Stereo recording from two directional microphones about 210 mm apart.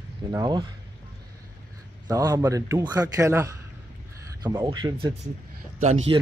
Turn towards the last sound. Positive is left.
turn(degrees=-35)  # may be behind; listen again after turning